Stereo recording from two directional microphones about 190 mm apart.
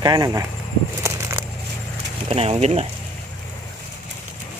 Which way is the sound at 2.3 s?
30° right (ahead or behind).